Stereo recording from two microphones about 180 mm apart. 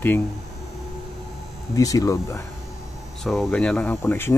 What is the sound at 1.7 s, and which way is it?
Speech, 20° left (ahead or behind).